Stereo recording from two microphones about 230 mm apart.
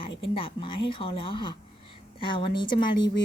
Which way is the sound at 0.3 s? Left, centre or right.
Left.